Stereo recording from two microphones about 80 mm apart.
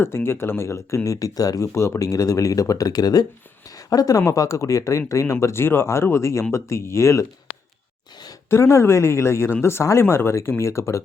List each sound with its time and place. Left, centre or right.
0.0 s speech: left
8.4 s speech: left